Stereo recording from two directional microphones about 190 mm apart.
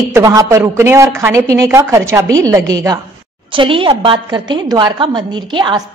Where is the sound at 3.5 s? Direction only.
25° right (ahead or behind).